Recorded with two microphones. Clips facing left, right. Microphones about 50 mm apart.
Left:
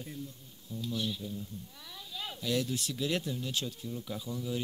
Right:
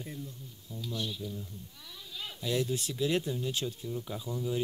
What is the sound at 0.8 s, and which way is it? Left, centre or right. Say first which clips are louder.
Speech: left 2 dB; centre.